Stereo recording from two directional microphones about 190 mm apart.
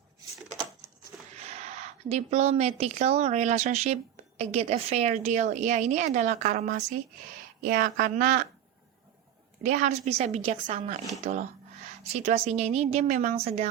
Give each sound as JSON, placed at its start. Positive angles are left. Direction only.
{"t": 1.1, "sound": "a sound", "side_deg": -5}
{"t": 1.5, "sound": "a woman's voice", "side_deg": -35}
{"t": 9.6, "sound": "a woman's voice", "side_deg": -40}